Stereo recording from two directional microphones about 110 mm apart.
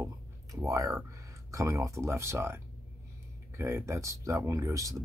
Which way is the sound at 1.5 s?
30° right (ahead or behind).